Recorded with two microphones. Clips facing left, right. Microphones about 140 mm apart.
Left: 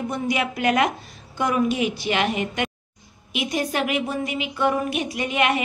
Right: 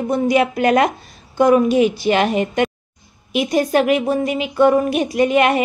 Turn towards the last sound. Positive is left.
turn(degrees=-45)  # may be behind; listen again after turning